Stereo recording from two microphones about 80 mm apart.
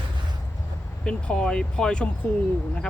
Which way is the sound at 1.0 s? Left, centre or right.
Centre.